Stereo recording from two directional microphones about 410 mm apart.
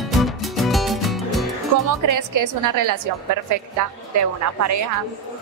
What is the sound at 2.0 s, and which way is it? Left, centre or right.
Speech, right.